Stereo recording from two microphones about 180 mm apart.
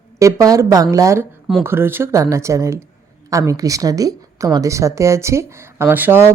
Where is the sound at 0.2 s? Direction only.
20° right (ahead or behind).